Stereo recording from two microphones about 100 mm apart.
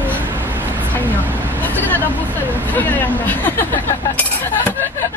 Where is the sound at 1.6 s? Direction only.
20° left (ahead or behind).